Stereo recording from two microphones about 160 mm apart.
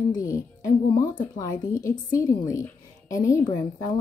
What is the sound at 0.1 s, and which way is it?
Music, 20° left (ahead or behind).